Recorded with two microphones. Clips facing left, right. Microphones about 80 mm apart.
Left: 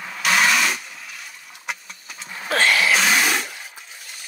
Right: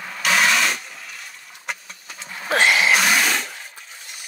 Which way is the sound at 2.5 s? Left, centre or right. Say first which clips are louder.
Right 1 dB; centre.